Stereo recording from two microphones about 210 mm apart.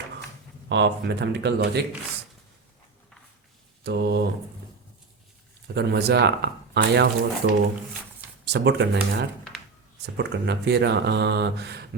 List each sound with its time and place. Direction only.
0.7 s speech: 55° right (ahead or behind)
3.8 s speech: 50° right (ahead or behind)
5.7 s speech: 50° right (ahead or behind)